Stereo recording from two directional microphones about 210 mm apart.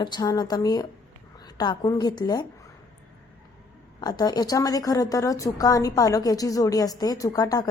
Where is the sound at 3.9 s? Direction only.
20° left (ahead or behind).